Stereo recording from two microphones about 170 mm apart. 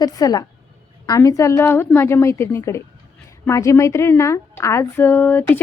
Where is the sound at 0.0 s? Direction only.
20° left (ahead or behind).